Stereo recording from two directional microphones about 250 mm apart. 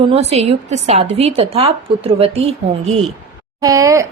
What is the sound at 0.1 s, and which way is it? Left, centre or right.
Speech, right.